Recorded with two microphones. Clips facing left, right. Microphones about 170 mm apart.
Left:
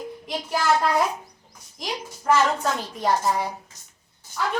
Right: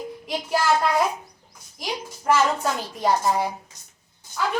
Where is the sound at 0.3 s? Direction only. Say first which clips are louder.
Right 2 dB; centre (ahead or behind).